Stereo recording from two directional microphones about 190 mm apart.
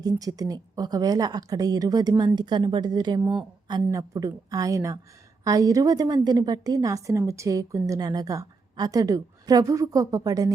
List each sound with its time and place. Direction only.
0.0 s a woman's voice: 20° right (ahead or behind)